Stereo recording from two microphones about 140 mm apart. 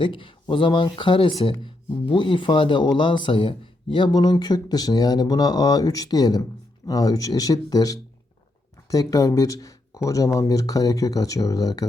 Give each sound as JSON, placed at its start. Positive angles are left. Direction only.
{"t": 0.0, "sound": "speech", "side_deg": 35}